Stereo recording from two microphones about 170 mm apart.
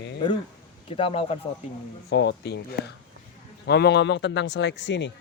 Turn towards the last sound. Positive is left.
turn(degrees=90)